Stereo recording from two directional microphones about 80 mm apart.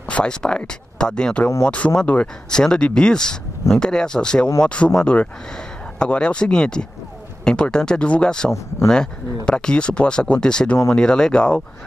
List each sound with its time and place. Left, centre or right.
0.1 s speech: centre